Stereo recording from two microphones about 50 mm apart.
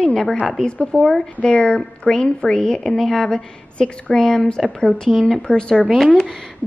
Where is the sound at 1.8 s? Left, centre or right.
Centre.